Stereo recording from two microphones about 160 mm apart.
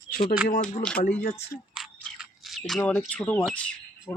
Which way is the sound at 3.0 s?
10° left (ahead or behind).